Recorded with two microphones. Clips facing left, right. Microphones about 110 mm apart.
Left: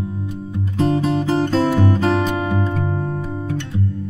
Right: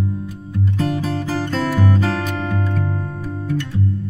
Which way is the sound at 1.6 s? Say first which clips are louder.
Left 2 dB; 25° left (ahead or behind).